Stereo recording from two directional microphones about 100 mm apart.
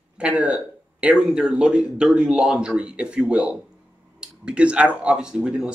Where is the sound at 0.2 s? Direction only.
10° right (ahead or behind).